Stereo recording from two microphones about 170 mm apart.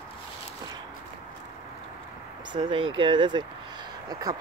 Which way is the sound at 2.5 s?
30° right (ahead or behind).